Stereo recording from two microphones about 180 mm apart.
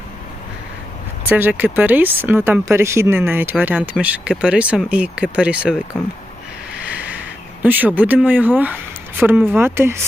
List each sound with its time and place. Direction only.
1.3 s speech: 10° right (ahead or behind)
6.7 s a sound: 10° right (ahead or behind)
7.6 s speech: 10° right (ahead or behind)